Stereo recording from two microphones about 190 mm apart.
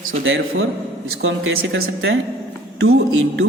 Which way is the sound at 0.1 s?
85° right.